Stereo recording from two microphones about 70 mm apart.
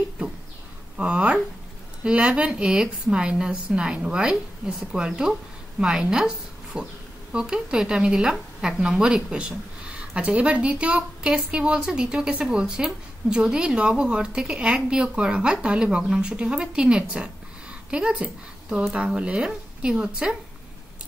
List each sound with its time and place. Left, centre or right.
0.9 s a woman's voice: centre